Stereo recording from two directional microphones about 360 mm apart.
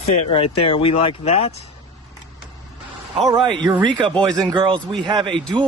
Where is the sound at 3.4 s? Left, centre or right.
Centre.